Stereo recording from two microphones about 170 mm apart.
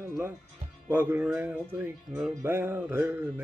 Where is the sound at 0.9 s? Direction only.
15° right (ahead or behind).